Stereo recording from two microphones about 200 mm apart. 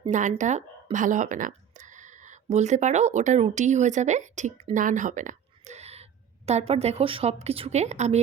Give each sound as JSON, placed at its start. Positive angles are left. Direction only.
{"t": 0.1, "sound": "a woman's voice", "side_deg": -40}